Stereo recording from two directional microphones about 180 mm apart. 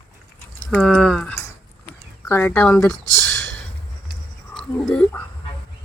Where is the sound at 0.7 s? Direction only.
5° left (ahead or behind).